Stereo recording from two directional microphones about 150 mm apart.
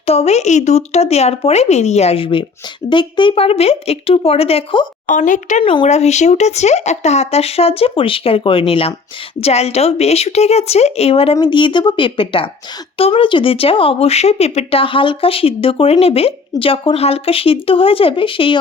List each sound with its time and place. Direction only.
0.0 s speech: 40° left (ahead or behind)
5.0 s speech: 60° left (ahead or behind); by 18.6 s 35° left (ahead or behind)